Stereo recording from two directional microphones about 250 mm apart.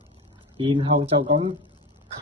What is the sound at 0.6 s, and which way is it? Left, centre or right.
Speech, right.